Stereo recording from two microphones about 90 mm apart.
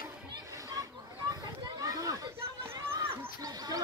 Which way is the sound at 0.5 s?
40° right (ahead or behind).